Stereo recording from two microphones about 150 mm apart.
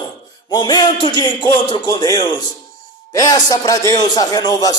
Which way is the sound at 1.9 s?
25° left (ahead or behind).